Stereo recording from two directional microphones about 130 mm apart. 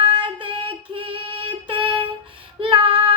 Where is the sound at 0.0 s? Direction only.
40° right (ahead or behind).